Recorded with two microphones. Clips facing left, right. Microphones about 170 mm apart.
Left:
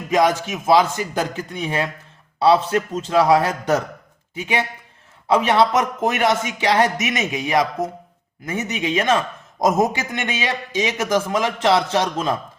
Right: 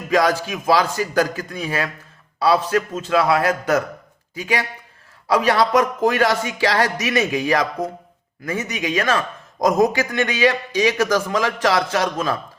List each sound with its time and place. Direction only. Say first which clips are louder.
0.3 s a man's voice: left 2 dB; 20° left (ahead or behind)